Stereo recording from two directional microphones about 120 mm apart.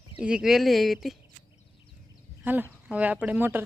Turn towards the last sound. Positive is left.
turn(degrees=-15)  # may be behind; listen again after turning